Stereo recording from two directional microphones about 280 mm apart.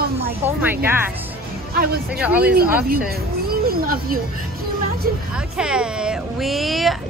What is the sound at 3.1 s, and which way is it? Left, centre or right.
Speech, right.